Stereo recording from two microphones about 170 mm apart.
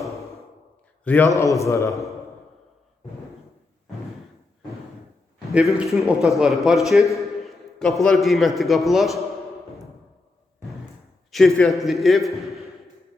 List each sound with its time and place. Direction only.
1.0 s a man's voice: 10° left (ahead or behind)
5.5 s a man's voice: 5° right (ahead or behind)
11.3 s a man's voice: centre (ahead or behind)